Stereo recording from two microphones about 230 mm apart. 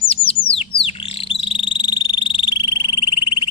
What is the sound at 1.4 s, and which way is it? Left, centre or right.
Frog, left.